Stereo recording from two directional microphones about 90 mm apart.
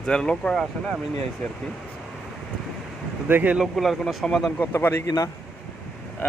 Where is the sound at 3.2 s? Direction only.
20° right (ahead or behind).